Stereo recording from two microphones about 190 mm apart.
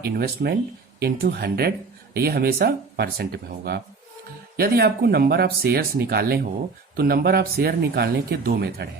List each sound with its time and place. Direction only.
0.0 s speech: 55° right (ahead or behind)